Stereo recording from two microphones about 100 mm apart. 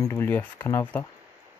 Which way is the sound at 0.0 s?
25° left (ahead or behind).